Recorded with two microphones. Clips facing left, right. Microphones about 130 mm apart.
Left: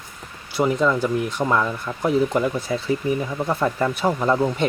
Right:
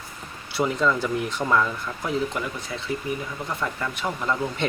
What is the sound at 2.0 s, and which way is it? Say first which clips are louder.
Speech: left 8 dB; 35° left (ahead or behind).